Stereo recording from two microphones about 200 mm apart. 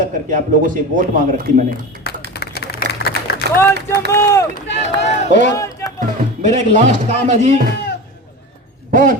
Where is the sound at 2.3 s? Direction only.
50° left (ahead or behind).